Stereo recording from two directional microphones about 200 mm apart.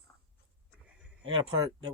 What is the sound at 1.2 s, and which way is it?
Speech, 25° right (ahead or behind).